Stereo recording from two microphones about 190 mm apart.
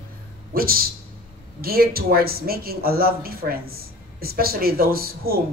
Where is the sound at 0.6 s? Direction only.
50° right (ahead or behind).